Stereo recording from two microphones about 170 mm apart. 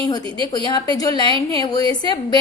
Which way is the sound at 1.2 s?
30° right (ahead or behind).